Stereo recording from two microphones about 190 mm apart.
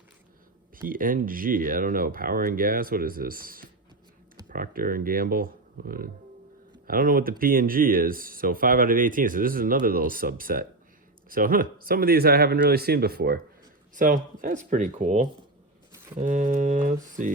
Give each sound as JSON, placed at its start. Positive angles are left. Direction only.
{"t": 0.8, "sound": "speech", "side_deg": -45}